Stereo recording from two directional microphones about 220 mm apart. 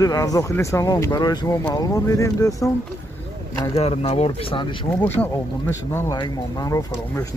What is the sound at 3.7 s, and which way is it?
Speech, 25° left (ahead or behind).